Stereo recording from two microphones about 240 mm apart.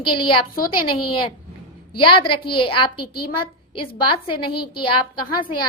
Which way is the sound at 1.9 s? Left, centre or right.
Left.